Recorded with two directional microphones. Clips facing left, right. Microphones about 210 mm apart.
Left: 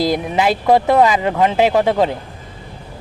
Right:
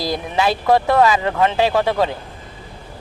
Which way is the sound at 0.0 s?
20° left (ahead or behind).